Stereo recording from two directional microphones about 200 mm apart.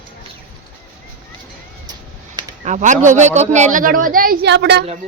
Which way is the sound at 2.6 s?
35° right (ahead or behind).